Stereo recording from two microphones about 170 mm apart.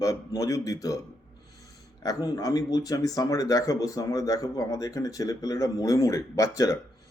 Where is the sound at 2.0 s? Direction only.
20° left (ahead or behind).